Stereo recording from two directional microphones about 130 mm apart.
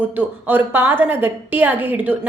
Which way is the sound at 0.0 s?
15° right (ahead or behind).